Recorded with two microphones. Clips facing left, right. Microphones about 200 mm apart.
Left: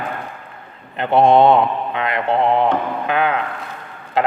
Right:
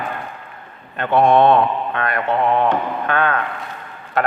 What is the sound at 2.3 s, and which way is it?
Speech, 30° left (ahead or behind).